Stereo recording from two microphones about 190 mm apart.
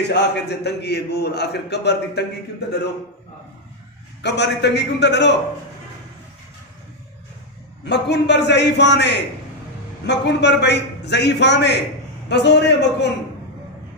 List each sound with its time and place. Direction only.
0.1 s a man's voice: 65° left (ahead or behind)
4.2 s a man's voice: 65° left (ahead or behind)
7.8 s a man's voice: 65° left (ahead or behind)